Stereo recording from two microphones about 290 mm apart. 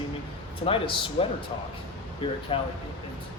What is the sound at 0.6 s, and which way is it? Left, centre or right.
Speech, centre.